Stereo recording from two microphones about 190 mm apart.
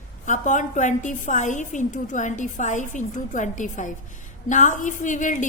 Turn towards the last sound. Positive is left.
turn(degrees=40)  # may be behind; listen again after turning